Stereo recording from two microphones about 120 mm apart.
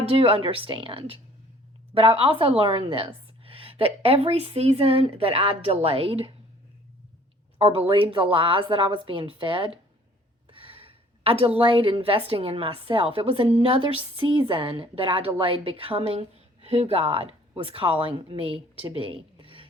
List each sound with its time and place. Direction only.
0.0 s a woman's voice: 50° right (ahead or behind)
7.6 s a woman's voice: 55° right (ahead or behind)